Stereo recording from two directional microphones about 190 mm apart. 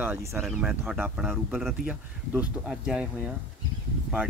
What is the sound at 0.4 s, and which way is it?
Speech, centre (ahead or behind).